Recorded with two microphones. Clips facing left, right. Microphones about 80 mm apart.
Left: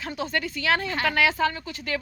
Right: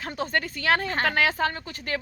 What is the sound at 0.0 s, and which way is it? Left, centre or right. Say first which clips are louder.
A woman's voice: right 1 dB; right.